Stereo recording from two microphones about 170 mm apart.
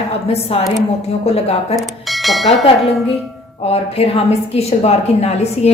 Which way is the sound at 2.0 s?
Centre (ahead or behind).